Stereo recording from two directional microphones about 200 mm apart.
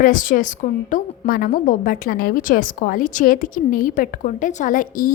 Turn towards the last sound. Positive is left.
turn(degrees=45)  # may be behind; listen again after turning